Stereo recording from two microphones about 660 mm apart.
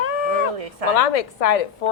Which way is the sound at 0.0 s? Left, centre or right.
Left.